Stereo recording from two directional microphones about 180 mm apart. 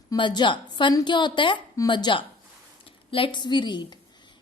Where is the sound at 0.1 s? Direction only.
25° left (ahead or behind).